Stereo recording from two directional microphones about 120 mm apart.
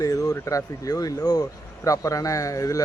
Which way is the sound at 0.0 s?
30° left (ahead or behind).